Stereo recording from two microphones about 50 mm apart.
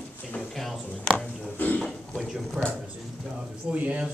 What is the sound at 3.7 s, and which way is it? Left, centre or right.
Speech, right.